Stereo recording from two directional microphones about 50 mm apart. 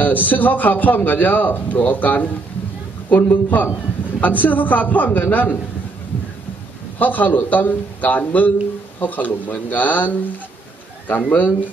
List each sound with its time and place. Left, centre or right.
0.0 s a man's voice: left
7.0 s a man's voice: left